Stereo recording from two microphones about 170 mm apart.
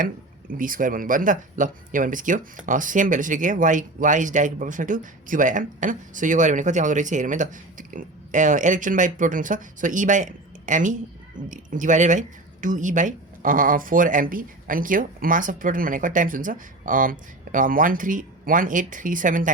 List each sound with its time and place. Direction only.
0.5 s speech: 55° right (ahead or behind)